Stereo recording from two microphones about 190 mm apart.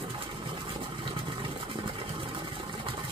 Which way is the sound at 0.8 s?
30° right (ahead or behind).